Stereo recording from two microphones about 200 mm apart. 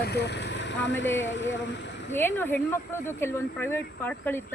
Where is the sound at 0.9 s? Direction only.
65° left (ahead or behind).